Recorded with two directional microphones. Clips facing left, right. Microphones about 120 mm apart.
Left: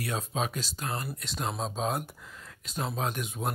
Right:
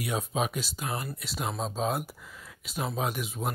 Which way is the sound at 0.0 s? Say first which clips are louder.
Right 2 dB; 10° right (ahead or behind).